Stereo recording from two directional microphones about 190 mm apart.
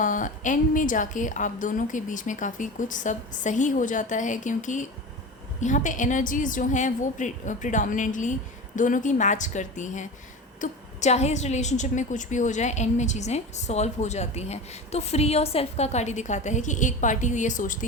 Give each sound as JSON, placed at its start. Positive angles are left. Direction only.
{"t": 0.0, "sound": "a woman's voice", "side_deg": 45}